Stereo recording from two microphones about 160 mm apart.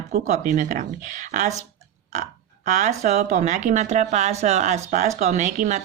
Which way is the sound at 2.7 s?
50° right (ahead or behind).